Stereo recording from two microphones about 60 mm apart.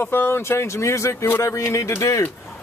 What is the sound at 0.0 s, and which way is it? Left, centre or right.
A man's voice, left.